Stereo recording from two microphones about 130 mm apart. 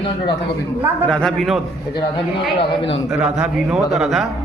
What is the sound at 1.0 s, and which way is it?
Speech, 5° left (ahead or behind).